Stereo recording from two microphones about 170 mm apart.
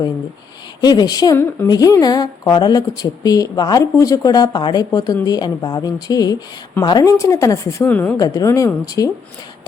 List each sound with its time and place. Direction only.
0.8 s a woman's voice: 25° left (ahead or behind)
8.2 s a woman's voice: 20° left (ahead or behind)